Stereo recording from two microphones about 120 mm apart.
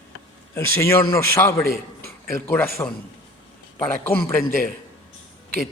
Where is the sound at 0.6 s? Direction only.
20° left (ahead or behind).